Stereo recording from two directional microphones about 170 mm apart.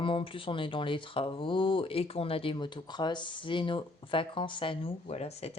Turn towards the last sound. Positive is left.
turn(degrees=40)  # may be behind; listen again after turning